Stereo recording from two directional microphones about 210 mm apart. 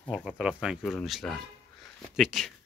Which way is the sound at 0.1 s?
5° right (ahead or behind).